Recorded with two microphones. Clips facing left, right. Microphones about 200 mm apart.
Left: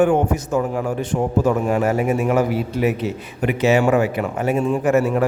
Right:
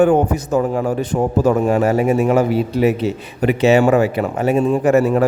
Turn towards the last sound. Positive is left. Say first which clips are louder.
# right 3 dB
turn(degrees=-35)  # may be behind; listen again after turning